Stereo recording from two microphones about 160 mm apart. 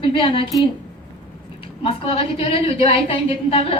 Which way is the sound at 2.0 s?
35° left (ahead or behind).